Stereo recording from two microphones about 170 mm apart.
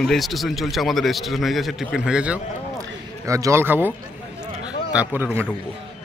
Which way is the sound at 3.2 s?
20° right (ahead or behind).